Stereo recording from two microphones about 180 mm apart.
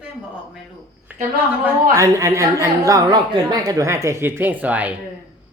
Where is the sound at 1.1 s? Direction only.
10° right (ahead or behind).